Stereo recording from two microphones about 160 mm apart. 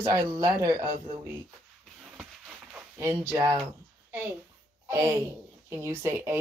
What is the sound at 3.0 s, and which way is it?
Speech, 15° right (ahead or behind).